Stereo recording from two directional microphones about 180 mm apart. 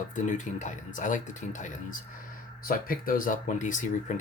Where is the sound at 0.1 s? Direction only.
45° left (ahead or behind).